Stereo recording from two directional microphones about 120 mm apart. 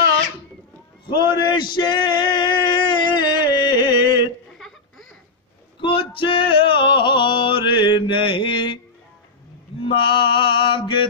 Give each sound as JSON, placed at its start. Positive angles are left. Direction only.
{"t": 1.0, "sound": "male singing", "side_deg": 40}
{"t": 5.8, "sound": "male singing", "side_deg": 45}
{"t": 9.8, "sound": "male singing", "side_deg": 45}